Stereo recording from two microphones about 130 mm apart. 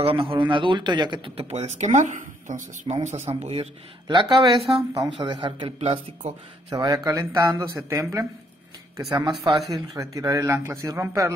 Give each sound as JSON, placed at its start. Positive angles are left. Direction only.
{"t": 0.0, "sound": "speech", "side_deg": -45}
{"t": 4.1, "sound": "speech", "side_deg": -35}
{"t": 5.8, "sound": "speech", "side_deg": -55}
{"t": 6.7, "sound": "a man's voice", "side_deg": -30}